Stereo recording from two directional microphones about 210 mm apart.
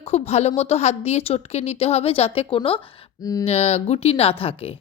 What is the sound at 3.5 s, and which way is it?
Speech, 30° left (ahead or behind).